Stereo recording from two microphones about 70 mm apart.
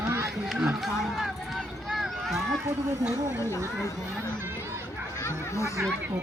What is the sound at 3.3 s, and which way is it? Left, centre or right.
Speech, left.